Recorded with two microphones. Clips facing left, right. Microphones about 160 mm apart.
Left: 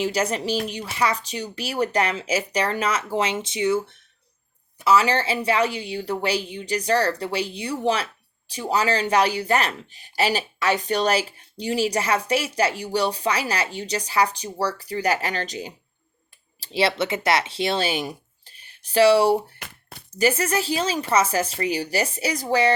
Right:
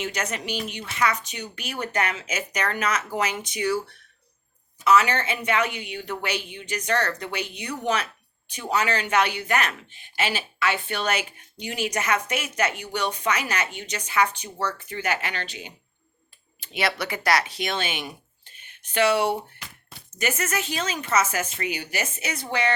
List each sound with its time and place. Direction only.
0.0 s speech: 35° left (ahead or behind)